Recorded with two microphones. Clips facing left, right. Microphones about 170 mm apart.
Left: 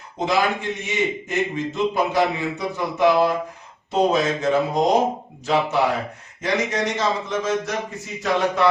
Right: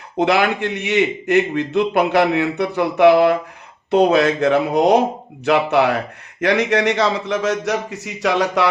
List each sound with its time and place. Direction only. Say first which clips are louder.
0.2 s a man's voice: right 5 dB; 65° right (ahead or behind)